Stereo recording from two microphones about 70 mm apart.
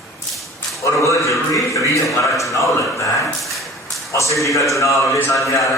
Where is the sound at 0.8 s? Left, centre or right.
Left.